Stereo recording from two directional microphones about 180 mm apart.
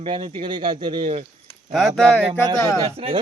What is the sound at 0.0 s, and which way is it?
Speech, 30° right (ahead or behind).